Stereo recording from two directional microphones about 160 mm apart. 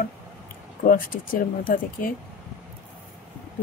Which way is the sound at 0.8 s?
60° left (ahead or behind).